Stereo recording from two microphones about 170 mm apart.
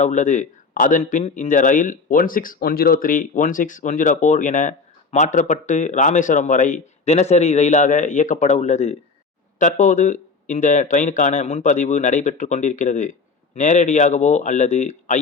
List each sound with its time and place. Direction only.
0.0 s speech: 45° left (ahead or behind)